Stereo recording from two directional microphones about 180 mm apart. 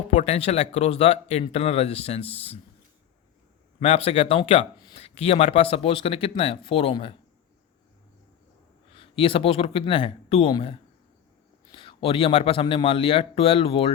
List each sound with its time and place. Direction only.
0.1 s speech: 35° left (ahead or behind)
3.8 s speech: 35° left (ahead or behind)
8.9 s speech: 30° left (ahead or behind)